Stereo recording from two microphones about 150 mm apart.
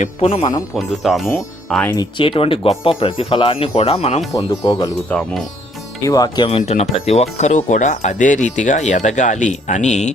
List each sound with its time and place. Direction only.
0.0 s speech: 45° left (ahead or behind)
0.8 s speech: centre (ahead or behind)
1.9 s speech: 30° left (ahead or behind)
4.3 s speech: 20° left (ahead or behind)
5.0 s speech: 10° left (ahead or behind)
6.0 s speech: 25° left (ahead or behind)
6.6 s speech: 45° left (ahead or behind)